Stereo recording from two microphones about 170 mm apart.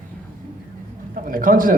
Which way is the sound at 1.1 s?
55° right (ahead or behind).